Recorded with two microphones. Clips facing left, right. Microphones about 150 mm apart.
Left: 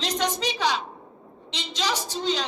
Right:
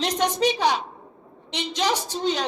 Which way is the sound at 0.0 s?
55° right (ahead or behind).